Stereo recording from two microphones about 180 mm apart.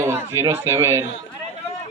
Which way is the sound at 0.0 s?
15° right (ahead or behind).